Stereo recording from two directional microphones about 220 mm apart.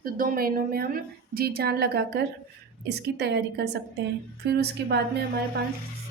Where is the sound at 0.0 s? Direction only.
40° right (ahead or behind).